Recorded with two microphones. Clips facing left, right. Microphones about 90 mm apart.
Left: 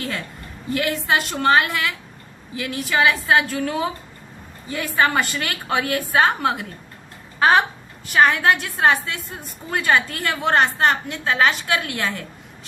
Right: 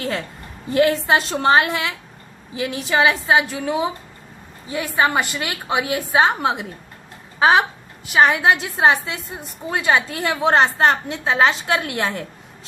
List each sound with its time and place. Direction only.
0.7 s a woman's voice: 30° right (ahead or behind)
7.3 s a woman's voice: 10° right (ahead or behind); by 12.2 s 30° right (ahead or behind)